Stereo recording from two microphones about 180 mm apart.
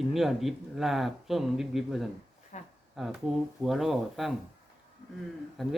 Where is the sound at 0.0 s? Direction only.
Centre (ahead or behind).